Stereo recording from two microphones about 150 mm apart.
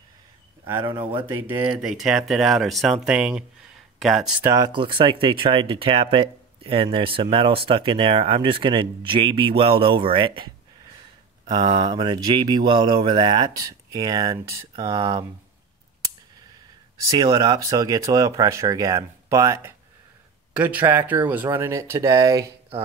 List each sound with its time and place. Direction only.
0.7 s speech: 15° right (ahead or behind)
4.5 s speech: 25° right (ahead or behind)
15.0 s speech: 30° right (ahead or behind)
17.1 s speech: 25° right (ahead or behind)
20.5 s speech: 10° right (ahead or behind)